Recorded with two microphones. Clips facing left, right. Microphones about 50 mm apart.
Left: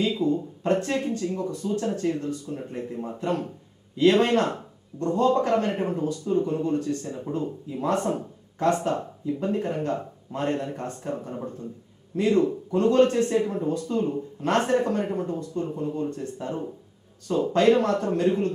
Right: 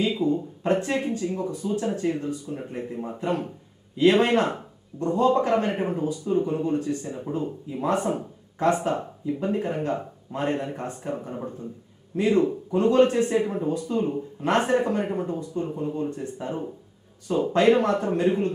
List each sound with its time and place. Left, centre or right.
0.0 s speech: centre